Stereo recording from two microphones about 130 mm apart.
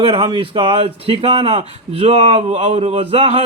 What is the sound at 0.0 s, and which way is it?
A man's voice, 45° right (ahead or behind).